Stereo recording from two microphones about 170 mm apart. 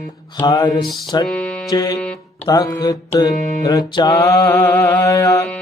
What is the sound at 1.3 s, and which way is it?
Music, 5° left (ahead or behind).